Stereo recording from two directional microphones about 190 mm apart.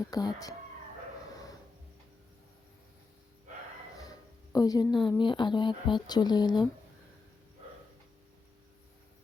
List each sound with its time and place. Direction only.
0.0 s speech: 20° left (ahead or behind)
4.5 s speech: 20° left (ahead or behind)